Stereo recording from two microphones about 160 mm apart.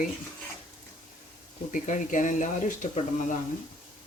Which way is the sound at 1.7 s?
55° left (ahead or behind).